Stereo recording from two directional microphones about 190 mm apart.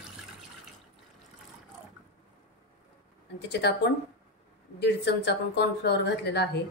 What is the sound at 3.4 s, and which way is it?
Speech, 60° left (ahead or behind).